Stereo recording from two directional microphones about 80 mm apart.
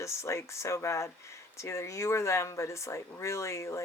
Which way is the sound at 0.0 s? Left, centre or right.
Left.